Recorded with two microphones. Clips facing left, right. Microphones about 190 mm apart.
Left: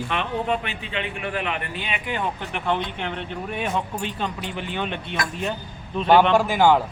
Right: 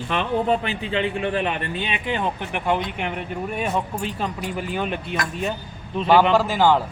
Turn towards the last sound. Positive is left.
turn(degrees=15)  # may be behind; listen again after turning